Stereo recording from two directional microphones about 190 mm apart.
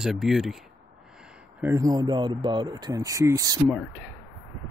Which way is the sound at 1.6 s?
15° right (ahead or behind).